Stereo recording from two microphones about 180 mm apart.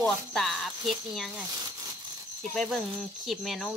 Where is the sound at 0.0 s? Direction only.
Centre (ahead or behind).